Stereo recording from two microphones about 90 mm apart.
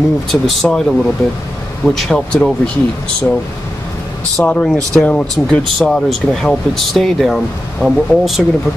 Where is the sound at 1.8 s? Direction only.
5° left (ahead or behind).